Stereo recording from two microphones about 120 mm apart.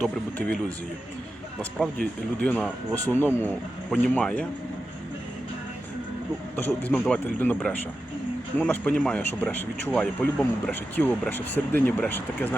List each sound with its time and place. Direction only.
0.0 s speech: 10° left (ahead or behind)
1.8 s speech: 10° left (ahead or behind)
6.6 s speech: 15° left (ahead or behind)